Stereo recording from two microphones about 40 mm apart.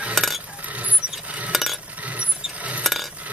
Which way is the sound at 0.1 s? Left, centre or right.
Centre.